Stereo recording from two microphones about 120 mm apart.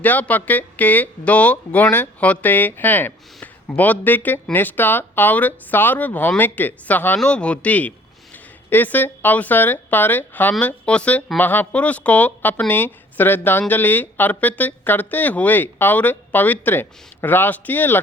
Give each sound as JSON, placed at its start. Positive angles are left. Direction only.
{"t": 0.0, "sound": "speech", "side_deg": 15}